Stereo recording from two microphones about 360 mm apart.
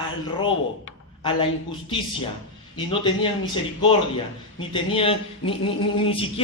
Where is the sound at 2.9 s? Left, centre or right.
Centre.